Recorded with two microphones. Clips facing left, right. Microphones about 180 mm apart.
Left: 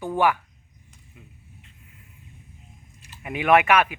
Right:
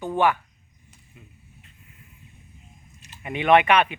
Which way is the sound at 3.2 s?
5° left (ahead or behind).